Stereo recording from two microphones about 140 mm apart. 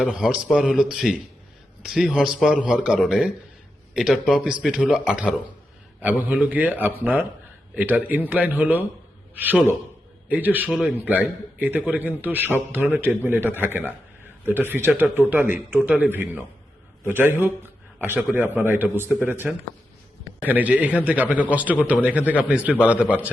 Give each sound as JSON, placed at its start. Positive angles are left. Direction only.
{"t": 0.0, "sound": "a man's voice", "side_deg": -5}
{"t": 10.7, "sound": "speech", "side_deg": 0}
{"t": 10.9, "sound": "a man's voice", "side_deg": -10}